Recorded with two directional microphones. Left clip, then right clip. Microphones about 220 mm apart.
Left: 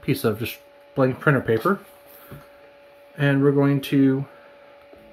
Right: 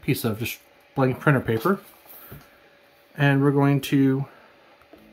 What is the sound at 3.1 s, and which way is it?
Speech, 10° right (ahead or behind).